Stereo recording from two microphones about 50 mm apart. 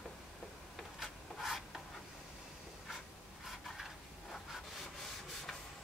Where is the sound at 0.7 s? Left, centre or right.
Centre.